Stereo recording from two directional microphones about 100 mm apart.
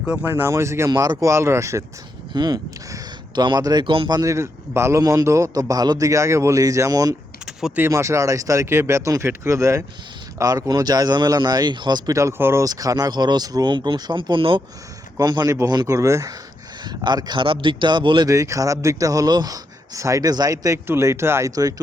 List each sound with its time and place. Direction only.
0.0 s speech: 10° right (ahead or behind)
0.3 s speech: 25° right (ahead or behind)
0.9 s a man's voice: 40° right (ahead or behind)
2.3 s speech: 45° right (ahead or behind)
3.8 s speech: 55° right (ahead or behind)
4.1 s a man's voice: 35° right (ahead or behind)
12.1 s speech: 25° right (ahead or behind)
12.6 s speech: 35° right (ahead or behind); by 14.6 s 55° right (ahead or behind)
15.2 s a man's voice: 40° right (ahead or behind)
16.8 s speech: 45° right (ahead or behind)
18.3 s a man's voice: 30° right (ahead or behind)